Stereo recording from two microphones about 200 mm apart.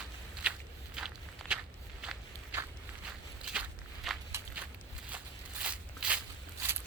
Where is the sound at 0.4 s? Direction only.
5° right (ahead or behind).